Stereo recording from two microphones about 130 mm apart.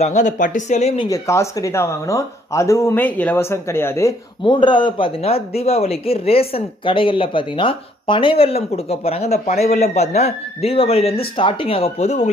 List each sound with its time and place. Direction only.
0.0 s speech: 70° left (ahead or behind)
1.1 s speech: 20° left (ahead or behind)
4.5 s speech: 35° left (ahead or behind); by 12.3 s 60° left (ahead or behind)